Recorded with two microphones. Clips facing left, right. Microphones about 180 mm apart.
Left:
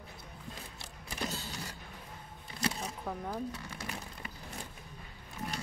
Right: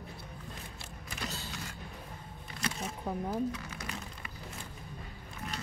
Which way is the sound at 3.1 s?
20° right (ahead or behind).